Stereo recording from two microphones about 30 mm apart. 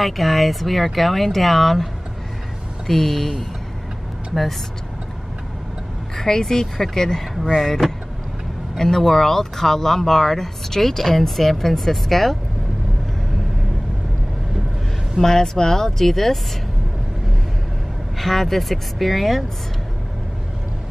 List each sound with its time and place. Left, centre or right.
0.0 s speech: centre
2.9 s speech: centre
6.1 s speech: centre
8.7 s speech: centre
15.1 s speech: centre
18.2 s speech: centre